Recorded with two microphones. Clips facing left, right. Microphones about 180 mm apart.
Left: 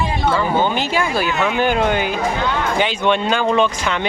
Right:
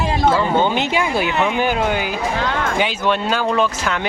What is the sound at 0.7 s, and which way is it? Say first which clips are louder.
Speech: even; 20° right (ahead or behind).